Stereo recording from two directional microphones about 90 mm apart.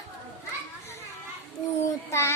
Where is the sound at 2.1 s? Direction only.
30° left (ahead or behind).